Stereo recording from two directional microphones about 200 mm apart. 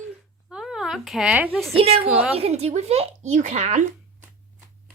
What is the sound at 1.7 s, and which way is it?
Speech, 30° right (ahead or behind).